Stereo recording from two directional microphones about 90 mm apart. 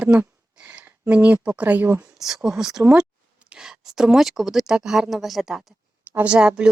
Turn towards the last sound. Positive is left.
turn(degrees=-10)  # may be behind; listen again after turning